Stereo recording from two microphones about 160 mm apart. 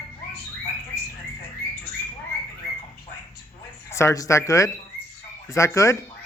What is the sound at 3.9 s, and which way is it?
Speech, 15° left (ahead or behind).